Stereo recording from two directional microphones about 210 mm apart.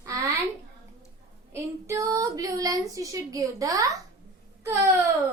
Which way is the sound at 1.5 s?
15° right (ahead or behind).